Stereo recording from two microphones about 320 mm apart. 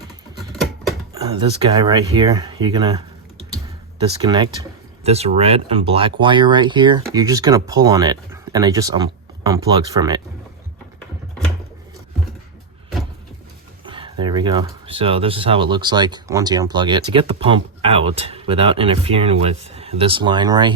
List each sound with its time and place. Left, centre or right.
0.5 s a sound: centre
1.1 s speech: centre
4.2 s speech: centre
13.8 s speech: centre